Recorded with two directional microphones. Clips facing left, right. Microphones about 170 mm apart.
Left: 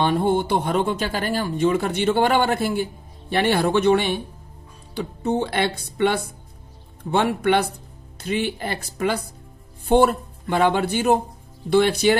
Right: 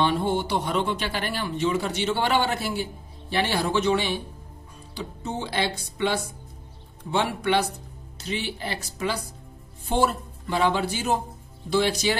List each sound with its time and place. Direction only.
0.0 s speech: 50° left (ahead or behind)